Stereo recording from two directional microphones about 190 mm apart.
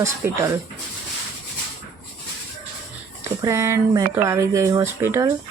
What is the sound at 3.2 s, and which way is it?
Speech, 15° right (ahead or behind).